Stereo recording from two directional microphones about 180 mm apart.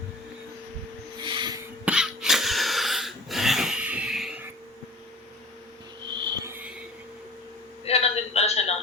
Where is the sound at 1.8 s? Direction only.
5° right (ahead or behind).